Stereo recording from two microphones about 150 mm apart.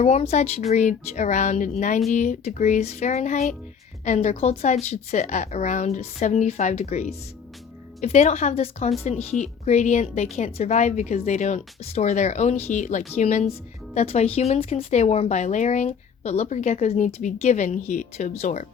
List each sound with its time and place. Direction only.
0.0 s speech: 45° left (ahead or behind)